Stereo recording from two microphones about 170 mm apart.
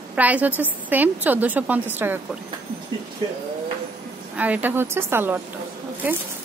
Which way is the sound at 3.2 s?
25° right (ahead or behind).